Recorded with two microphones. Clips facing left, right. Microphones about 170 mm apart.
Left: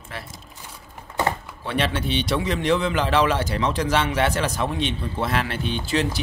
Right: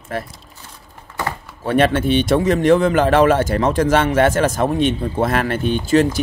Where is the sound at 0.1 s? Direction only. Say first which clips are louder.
Right 11 dB; 50° right (ahead or behind).